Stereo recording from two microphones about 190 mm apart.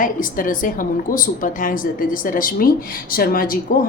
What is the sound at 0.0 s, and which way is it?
A woman's voice, 45° left (ahead or behind).